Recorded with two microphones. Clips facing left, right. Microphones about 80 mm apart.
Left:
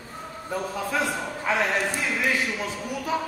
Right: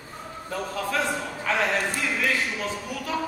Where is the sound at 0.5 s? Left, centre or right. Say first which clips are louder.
Even; centre.